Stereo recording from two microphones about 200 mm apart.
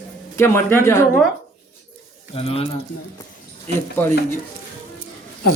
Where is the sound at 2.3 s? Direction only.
30° left (ahead or behind).